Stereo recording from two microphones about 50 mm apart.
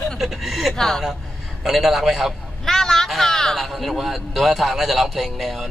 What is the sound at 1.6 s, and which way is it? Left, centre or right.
Speech, centre.